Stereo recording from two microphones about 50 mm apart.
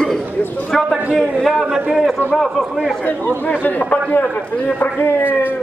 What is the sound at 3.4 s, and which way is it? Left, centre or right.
A man's voice, left.